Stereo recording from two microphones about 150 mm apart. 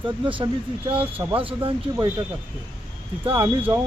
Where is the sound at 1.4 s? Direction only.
35° right (ahead or behind).